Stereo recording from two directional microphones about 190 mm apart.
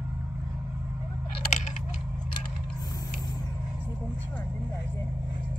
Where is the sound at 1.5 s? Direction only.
40° left (ahead or behind).